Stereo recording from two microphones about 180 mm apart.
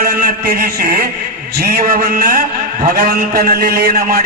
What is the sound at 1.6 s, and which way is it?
A man's voice, 55° right (ahead or behind).